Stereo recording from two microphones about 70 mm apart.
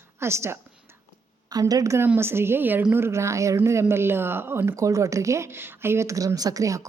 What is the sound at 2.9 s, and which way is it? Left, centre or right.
A woman's voice, right.